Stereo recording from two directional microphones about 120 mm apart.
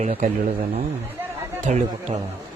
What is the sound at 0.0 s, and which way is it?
Speech, 70° right (ahead or behind).